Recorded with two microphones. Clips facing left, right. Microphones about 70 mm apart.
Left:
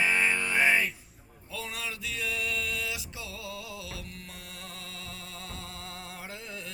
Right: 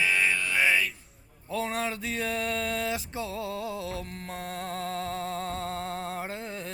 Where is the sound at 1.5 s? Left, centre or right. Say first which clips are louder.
Right 8 dB; right.